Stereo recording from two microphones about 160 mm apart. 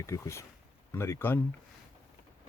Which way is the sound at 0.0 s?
20° left (ahead or behind).